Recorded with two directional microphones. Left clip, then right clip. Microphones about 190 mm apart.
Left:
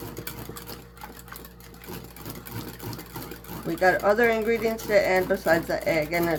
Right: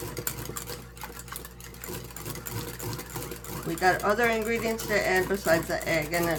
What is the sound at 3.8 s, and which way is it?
Speech, 30° left (ahead or behind).